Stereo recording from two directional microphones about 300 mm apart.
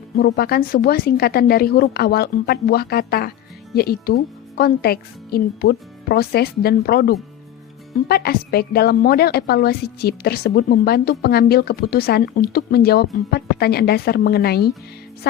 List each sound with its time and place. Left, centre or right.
0.2 s a woman's voice: left